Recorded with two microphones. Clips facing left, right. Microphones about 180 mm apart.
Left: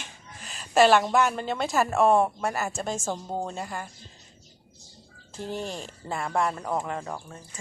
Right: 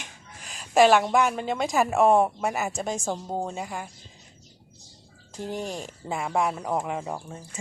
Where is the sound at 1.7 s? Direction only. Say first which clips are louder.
Right 1 dB; 10° right (ahead or behind).